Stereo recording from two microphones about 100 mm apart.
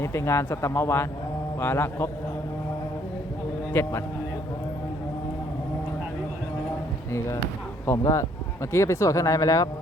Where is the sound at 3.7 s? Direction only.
25° left (ahead or behind).